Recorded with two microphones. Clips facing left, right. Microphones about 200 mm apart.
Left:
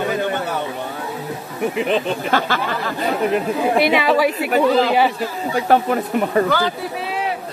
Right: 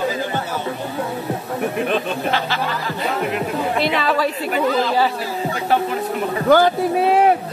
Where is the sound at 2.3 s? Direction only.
50° left (ahead or behind).